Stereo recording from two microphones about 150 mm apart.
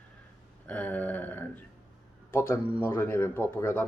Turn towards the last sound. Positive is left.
turn(degrees=15)  # may be behind; listen again after turning